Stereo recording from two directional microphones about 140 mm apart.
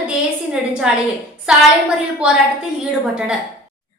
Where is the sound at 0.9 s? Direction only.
5° right (ahead or behind).